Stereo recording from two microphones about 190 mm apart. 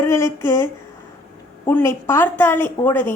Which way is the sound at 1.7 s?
10° left (ahead or behind).